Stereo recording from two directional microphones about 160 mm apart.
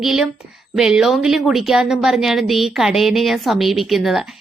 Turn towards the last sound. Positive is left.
turn(degrees=0)  # may be behind; listen again after turning